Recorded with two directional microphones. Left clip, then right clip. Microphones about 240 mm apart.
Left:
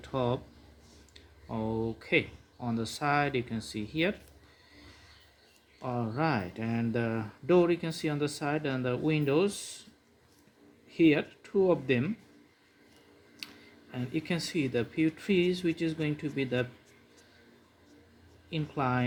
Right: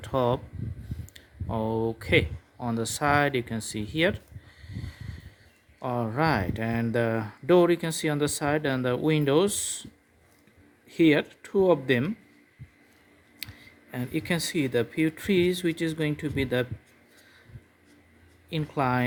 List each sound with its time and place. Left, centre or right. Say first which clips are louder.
0.0 s speech: right 6 dB; right
5.8 s speech: right 5 dB; right
10.8 s speech: right 3 dB; right
13.9 s speech: right 4 dB; right
18.5 s speech: right 5 dB; right